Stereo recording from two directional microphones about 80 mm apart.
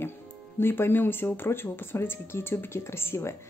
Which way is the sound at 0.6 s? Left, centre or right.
Left.